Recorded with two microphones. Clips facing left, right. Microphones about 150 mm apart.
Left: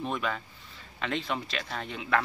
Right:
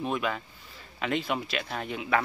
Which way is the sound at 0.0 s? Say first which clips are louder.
Right 2 dB; 5° right (ahead or behind).